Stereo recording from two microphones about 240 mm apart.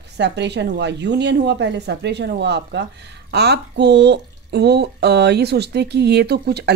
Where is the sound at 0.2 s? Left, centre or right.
Right.